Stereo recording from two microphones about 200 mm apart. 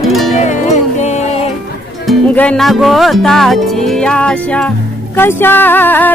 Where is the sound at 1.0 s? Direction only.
35° left (ahead or behind).